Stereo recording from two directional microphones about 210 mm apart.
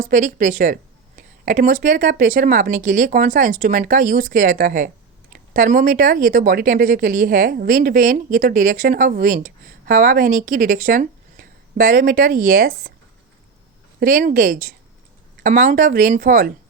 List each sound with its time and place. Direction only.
0.0 s speech: 40° right (ahead or behind)
14.0 s speech: 40° right (ahead or behind)